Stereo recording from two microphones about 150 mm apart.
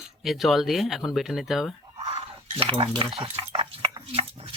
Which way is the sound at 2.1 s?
40° right (ahead or behind).